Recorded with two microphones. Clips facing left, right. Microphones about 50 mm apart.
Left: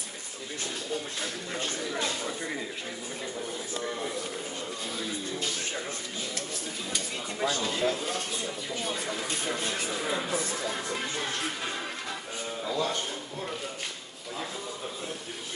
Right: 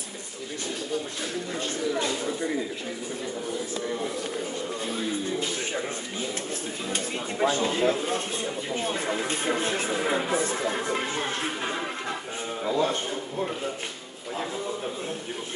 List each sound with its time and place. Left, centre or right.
6.9 s a man's voice: right